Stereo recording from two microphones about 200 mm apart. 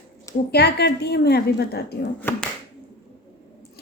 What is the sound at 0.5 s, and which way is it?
A woman's voice, 55° left (ahead or behind).